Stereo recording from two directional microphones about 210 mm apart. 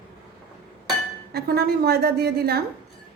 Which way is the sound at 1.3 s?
45° right (ahead or behind).